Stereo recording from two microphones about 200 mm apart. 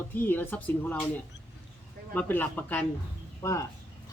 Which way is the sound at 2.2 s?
10° left (ahead or behind).